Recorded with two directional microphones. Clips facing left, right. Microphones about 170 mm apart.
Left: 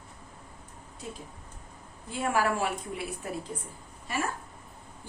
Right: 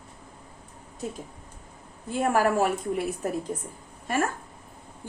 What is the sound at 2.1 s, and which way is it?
A woman's voice, 45° right (ahead or behind).